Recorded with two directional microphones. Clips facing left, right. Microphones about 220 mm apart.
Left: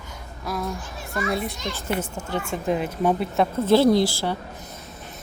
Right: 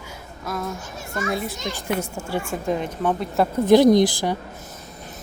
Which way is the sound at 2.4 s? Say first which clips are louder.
Left 3 dB; 5° left (ahead or behind).